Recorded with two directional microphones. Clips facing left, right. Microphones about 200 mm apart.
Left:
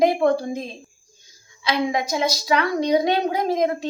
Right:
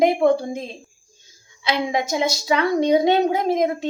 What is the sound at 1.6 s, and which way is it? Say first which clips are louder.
A woman's voice: even; 25° right (ahead or behind).